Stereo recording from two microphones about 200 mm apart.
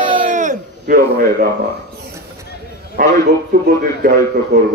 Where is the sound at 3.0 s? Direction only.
45° right (ahead or behind).